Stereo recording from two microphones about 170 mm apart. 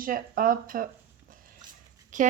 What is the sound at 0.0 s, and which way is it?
Speech, 55° right (ahead or behind).